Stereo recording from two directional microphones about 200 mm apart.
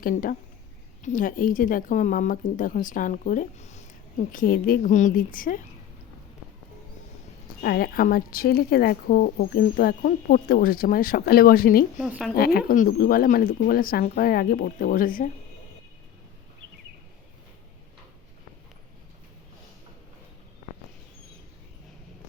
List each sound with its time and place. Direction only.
0.0 s a woman's voice: 45° left (ahead or behind)
7.6 s a woman's voice: 50° left (ahead or behind)
11.9 s speech: centre (ahead or behind)
12.5 s a woman's voice: 45° left (ahead or behind)